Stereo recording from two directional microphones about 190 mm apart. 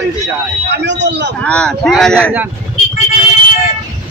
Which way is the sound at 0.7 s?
65° right (ahead or behind).